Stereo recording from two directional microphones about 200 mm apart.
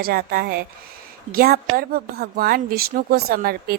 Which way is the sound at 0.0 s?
50° right (ahead or behind).